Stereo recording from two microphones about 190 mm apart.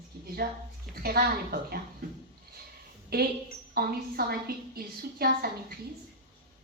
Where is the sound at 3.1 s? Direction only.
55° right (ahead or behind).